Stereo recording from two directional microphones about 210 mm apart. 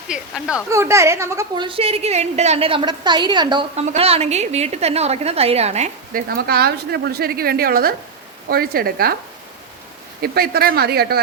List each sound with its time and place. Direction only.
0.1 s a woman's voice: 5° right (ahead or behind); by 6.2 s 30° right (ahead or behind)
6.2 s a woman's voice: 50° right (ahead or behind)
10.2 s a woman's voice: 45° right (ahead or behind)